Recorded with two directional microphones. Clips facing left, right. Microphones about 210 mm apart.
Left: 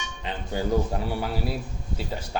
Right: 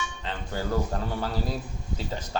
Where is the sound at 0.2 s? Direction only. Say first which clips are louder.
Left 5 dB; 15° left (ahead or behind).